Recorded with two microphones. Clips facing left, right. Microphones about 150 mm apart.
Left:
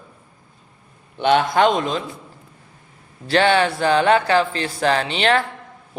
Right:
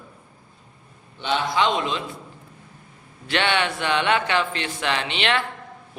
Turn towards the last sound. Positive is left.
turn(degrees=40)  # may be behind; listen again after turning